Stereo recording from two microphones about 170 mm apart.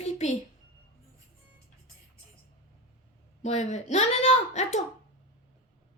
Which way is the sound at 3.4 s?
40° left (ahead or behind).